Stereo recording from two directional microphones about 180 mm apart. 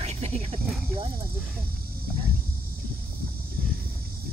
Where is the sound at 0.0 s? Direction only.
35° right (ahead or behind).